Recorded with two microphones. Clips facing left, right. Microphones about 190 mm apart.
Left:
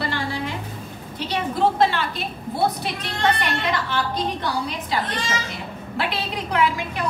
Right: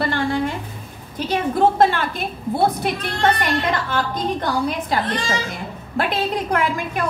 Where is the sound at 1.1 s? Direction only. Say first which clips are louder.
Right 5 dB; 50° right (ahead or behind).